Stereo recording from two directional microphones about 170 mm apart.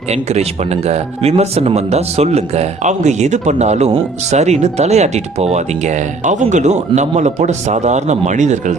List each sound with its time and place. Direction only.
0.1 s speech: 40° right (ahead or behind)